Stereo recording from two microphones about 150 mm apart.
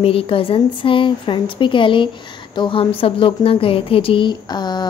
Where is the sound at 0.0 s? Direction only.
40° left (ahead or behind).